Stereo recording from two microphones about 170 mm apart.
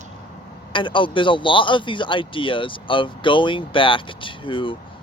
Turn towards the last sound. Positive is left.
turn(degrees=30)  # may be behind; listen again after turning